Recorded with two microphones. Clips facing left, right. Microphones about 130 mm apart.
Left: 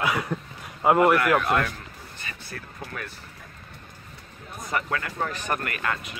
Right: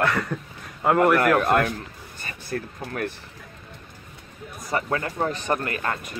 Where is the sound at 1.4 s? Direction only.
45° right (ahead or behind).